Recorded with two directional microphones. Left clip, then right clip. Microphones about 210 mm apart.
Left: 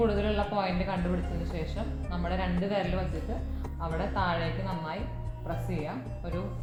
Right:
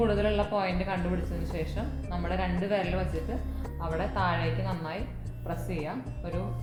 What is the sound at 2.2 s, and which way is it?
Speech, 15° left (ahead or behind).